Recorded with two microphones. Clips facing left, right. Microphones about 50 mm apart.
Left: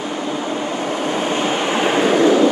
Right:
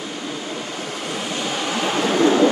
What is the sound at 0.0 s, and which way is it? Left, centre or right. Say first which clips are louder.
Vehicle: left 6 dB; left.